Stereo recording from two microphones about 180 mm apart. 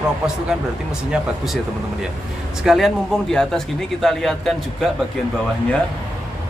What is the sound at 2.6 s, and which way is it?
Speech, centre (ahead or behind).